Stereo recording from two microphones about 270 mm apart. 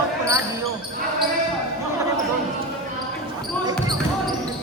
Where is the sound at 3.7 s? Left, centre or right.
Centre.